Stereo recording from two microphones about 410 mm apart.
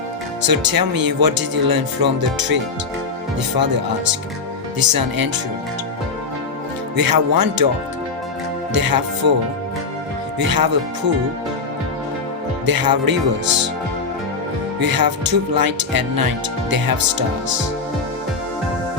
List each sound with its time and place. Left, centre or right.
0.4 s speech: right
4.8 s speech: right
6.9 s speech: right
8.7 s speech: right
10.3 s speech: right
12.6 s speech: right
14.8 s speech: right